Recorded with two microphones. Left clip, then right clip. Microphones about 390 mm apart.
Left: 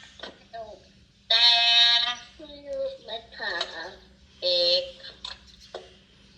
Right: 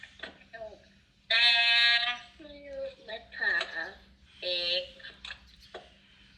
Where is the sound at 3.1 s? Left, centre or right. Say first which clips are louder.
Right 2 dB; centre.